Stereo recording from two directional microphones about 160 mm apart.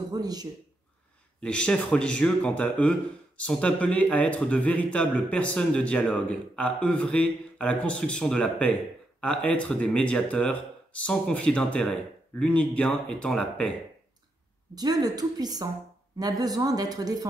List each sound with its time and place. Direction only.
0.1 s speech: 25° right (ahead or behind)
1.4 s speech: 5° left (ahead or behind)
14.8 s speech: 25° right (ahead or behind)